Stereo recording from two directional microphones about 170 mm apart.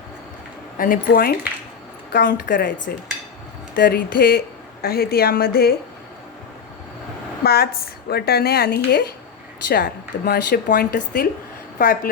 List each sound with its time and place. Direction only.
0.8 s a woman's voice: 55° left (ahead or behind)
3.8 s a woman's voice: 55° left (ahead or behind)
7.4 s a woman's voice: 65° left (ahead or behind)